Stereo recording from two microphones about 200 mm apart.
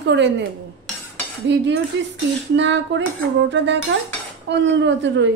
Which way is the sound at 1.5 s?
65° right (ahead or behind).